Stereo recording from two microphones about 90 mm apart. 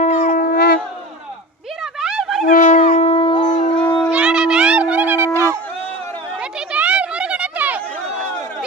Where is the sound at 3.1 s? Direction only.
80° left.